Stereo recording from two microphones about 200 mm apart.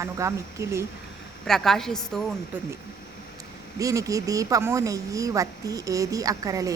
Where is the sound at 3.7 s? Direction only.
15° right (ahead or behind).